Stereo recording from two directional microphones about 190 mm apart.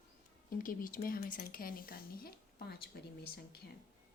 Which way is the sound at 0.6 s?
45° left (ahead or behind).